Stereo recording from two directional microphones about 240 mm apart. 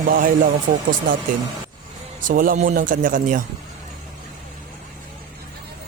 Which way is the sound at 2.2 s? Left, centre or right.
Right.